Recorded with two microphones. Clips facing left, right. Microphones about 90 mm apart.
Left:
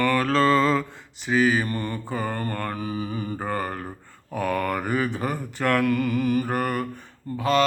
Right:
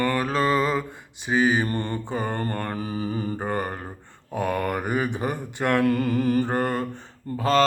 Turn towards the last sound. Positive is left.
turn(degrees=-35)  # may be behind; listen again after turning